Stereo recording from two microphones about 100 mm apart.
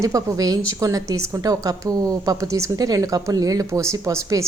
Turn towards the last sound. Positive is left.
turn(degrees=-30)  # may be behind; listen again after turning